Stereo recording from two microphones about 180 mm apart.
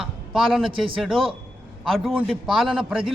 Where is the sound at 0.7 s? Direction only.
30° right (ahead or behind).